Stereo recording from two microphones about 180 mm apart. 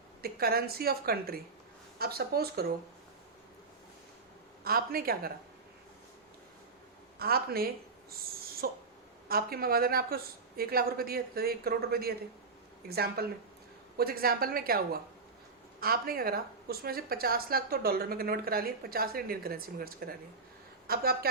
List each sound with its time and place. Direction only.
0.2 s speech: 55° right (ahead or behind)
4.6 s speech: 55° right (ahead or behind)
7.2 s speech: 60° right (ahead or behind)
15.8 s a man's voice: 55° right (ahead or behind)